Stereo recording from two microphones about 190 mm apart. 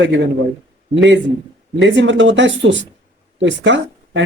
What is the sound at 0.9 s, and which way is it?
Speech, 75° right (ahead or behind).